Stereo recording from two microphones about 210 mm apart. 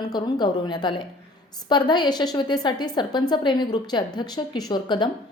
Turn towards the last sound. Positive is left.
turn(degrees=20)  # may be behind; listen again after turning